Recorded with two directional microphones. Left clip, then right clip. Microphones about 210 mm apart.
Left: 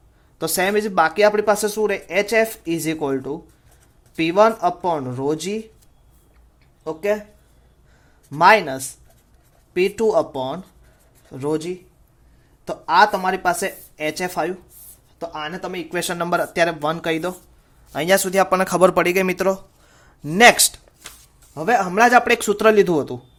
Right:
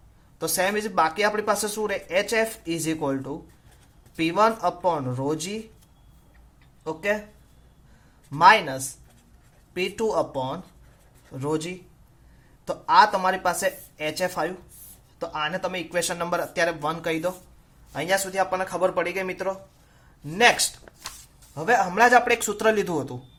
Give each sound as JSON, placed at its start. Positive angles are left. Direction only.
{"t": 0.3, "sound": "speech", "side_deg": 30}
{"t": 8.3, "sound": "speech", "side_deg": 30}
{"t": 17.9, "sound": "speech", "side_deg": 45}
{"t": 21.5, "sound": "speech", "side_deg": 35}